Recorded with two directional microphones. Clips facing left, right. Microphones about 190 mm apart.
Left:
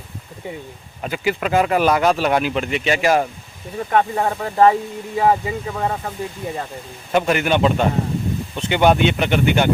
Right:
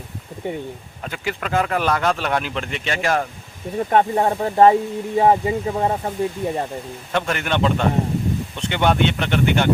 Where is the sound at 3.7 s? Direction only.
25° right (ahead or behind).